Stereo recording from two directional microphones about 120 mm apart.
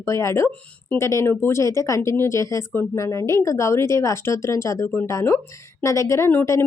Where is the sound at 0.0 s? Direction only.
25° left (ahead or behind).